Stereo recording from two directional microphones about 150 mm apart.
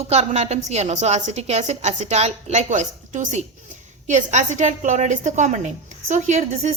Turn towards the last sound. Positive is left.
turn(degrees=-50)  # may be behind; listen again after turning